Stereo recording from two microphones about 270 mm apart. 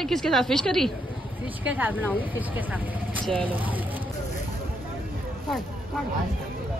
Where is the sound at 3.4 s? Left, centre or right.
Centre.